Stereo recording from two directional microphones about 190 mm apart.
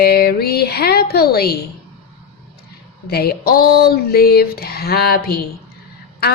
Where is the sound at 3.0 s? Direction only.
55° left (ahead or behind).